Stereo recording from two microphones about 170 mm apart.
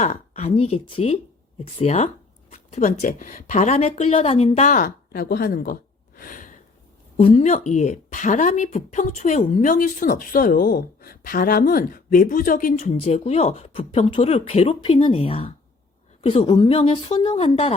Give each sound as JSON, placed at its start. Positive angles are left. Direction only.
{"t": 0.0, "sound": "a woman's voice", "side_deg": 40}
{"t": 7.2, "sound": "a woman's voice", "side_deg": 35}